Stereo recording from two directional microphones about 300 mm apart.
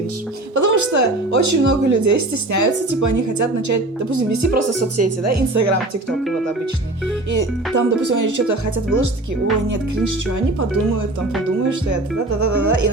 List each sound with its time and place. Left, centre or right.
0.5 s speech: right
4.8 s speech: right
6.1 s speech: centre
7.3 s speech: right
12.4 s speech: right